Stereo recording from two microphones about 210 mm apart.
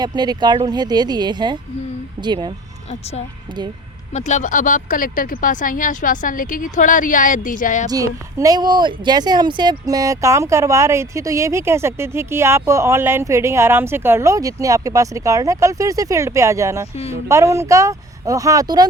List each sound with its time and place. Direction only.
0.0 s speech: 20° right (ahead or behind)
4.1 s speech: 35° left (ahead or behind)
7.9 s a woman's voice: 15° right (ahead or behind)